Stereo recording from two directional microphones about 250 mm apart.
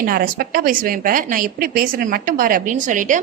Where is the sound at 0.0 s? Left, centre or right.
Right.